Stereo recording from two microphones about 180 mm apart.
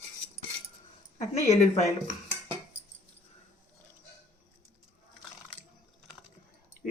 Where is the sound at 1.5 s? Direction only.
40° left (ahead or behind).